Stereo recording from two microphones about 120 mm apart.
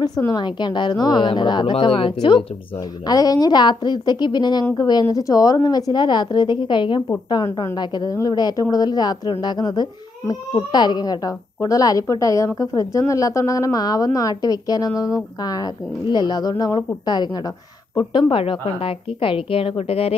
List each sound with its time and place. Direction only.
0.3 s speech: 40° left (ahead or behind)
3.1 s a woman's voice: 30° left (ahead or behind); by 20.2 s 55° left (ahead or behind)